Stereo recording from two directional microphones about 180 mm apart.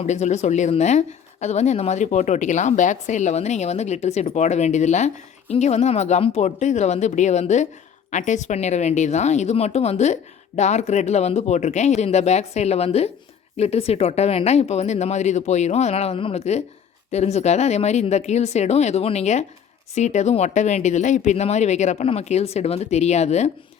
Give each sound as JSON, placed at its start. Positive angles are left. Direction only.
{"t": 0.0, "sound": "a woman's voice", "side_deg": 40}